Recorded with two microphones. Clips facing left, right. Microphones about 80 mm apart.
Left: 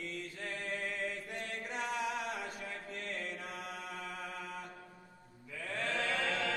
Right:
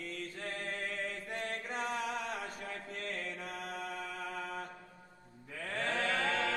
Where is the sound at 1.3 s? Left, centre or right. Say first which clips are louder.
Right 2 dB; right.